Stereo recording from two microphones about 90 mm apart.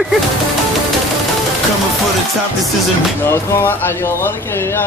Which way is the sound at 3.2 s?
25° left (ahead or behind).